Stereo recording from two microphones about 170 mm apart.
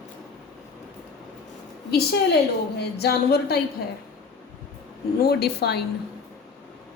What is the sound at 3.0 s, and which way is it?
Speech, 70° left (ahead or behind).